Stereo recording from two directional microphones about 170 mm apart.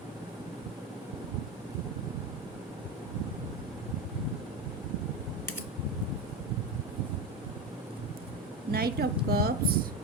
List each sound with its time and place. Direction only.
8.7 s speech: 65° right (ahead or behind)